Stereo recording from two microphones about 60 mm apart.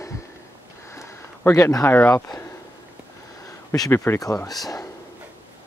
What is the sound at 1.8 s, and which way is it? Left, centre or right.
Speech, left.